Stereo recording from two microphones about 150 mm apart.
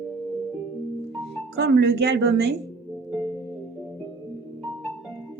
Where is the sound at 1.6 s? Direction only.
90° right.